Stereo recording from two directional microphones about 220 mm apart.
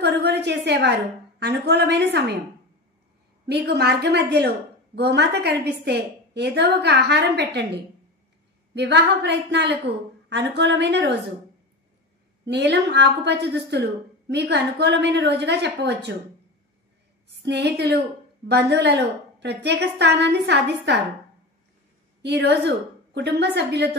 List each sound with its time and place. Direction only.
0.0 s a woman's voice: 50° right (ahead or behind)
3.4 s a woman's voice: 50° right (ahead or behind)
12.4 s a woman's voice: 50° right (ahead or behind)
17.4 s a woman's voice: 50° right (ahead or behind)
22.2 s a woman's voice: 50° right (ahead or behind)